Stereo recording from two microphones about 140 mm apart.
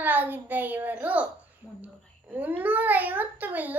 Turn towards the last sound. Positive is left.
turn(degrees=-10)  # may be behind; listen again after turning